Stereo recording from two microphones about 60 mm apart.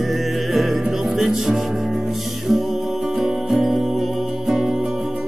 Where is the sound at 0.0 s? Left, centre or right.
Centre.